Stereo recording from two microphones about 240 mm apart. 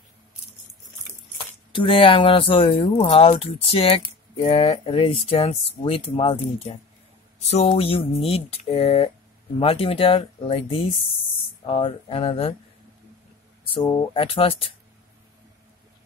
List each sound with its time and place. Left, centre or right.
1.7 s speech: left
13.7 s speech: centre